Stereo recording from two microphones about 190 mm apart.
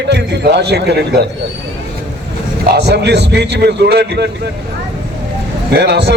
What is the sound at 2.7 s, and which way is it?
A man's voice, 60° right (ahead or behind).